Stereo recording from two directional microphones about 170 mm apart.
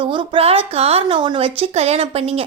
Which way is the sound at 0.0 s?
30° right (ahead or behind).